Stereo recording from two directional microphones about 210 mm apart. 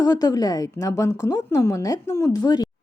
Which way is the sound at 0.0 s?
15° left (ahead or behind).